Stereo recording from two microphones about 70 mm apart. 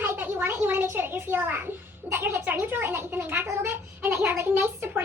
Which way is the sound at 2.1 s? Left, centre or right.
Right.